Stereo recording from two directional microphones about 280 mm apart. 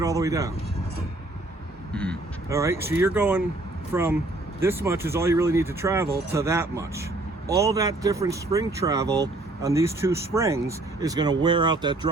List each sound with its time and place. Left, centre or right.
0.0 s speech: centre
1.9 s speech: centre
2.5 s speech: centre